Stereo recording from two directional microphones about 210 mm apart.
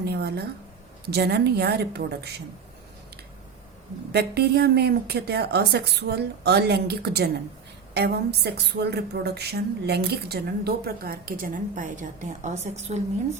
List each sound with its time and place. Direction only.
0.0 s speech: 50° right (ahead or behind)
4.1 s speech: 50° right (ahead or behind); by 13.0 s 30° right (ahead or behind)